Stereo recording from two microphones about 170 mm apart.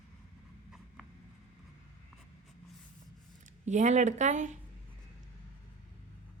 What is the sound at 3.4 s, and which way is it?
Speech, 45° right (ahead or behind).